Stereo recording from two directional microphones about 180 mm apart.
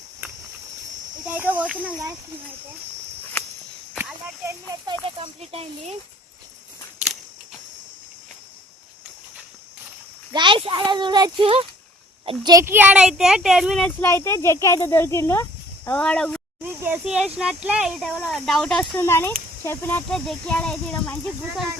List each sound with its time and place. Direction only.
1.3 s speech: 10° right (ahead or behind)
3.9 s speech: 10° right (ahead or behind)
5.0 s speech: 30° right (ahead or behind)
10.3 s speech: 25° right (ahead or behind); by 13.9 s centre (ahead or behind)
14.0 s speech: 15° left (ahead or behind)
16.6 s speech: 10° right (ahead or behind)
18.9 s speech: 15° left (ahead or behind)